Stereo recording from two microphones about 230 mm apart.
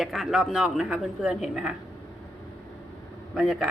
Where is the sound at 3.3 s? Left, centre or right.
Centre.